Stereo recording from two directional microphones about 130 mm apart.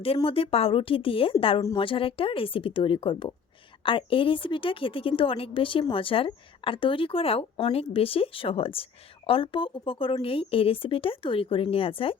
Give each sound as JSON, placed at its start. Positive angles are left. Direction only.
{"t": 0.3, "sound": "a woman's voice", "side_deg": 45}